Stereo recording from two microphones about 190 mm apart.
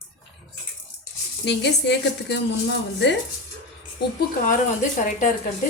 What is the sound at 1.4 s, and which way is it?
A woman's voice, 65° left (ahead or behind).